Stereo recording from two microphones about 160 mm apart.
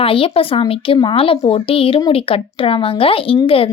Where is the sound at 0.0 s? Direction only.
35° left (ahead or behind).